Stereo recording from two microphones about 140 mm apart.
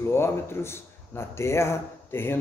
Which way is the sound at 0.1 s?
15° left (ahead or behind).